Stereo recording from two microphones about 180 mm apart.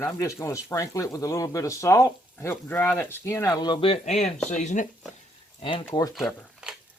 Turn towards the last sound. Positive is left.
turn(degrees=0)  # may be behind; listen again after turning